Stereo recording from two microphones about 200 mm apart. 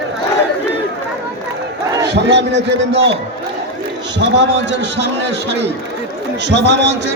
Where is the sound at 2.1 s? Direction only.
60° right (ahead or behind).